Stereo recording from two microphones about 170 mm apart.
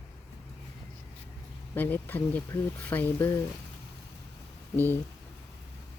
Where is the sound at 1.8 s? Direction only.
10° left (ahead or behind).